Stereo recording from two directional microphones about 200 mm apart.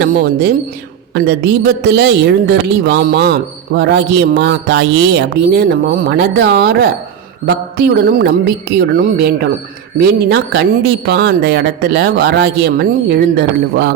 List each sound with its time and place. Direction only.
0.0 s a man's voice: 55° right (ahead or behind)
7.4 s mantra: 55° right (ahead or behind)
10.2 s a man's voice: 55° right (ahead or behind)